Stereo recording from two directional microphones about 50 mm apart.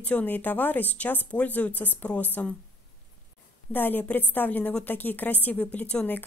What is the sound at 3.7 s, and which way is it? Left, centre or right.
Speech, left.